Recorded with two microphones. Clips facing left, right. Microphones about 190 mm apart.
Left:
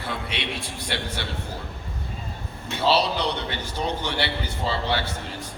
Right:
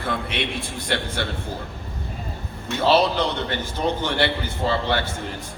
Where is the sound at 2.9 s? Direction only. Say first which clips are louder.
Right 4 dB; 50° right (ahead or behind).